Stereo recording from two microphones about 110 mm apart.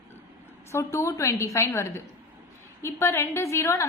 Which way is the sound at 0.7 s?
25° left (ahead or behind).